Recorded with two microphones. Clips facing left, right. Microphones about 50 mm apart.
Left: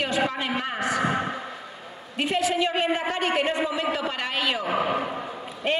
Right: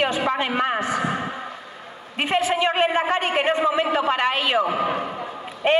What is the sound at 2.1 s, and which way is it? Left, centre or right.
A man's voice, right.